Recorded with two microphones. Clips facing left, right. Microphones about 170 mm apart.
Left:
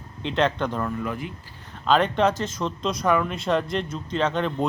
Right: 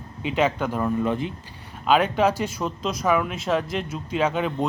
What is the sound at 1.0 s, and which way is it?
Speech, 25° right (ahead or behind).